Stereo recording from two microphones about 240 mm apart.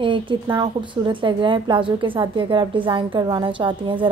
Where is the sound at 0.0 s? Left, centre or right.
Centre.